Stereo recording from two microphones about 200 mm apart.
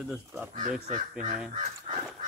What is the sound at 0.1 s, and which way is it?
Speech, centre (ahead or behind).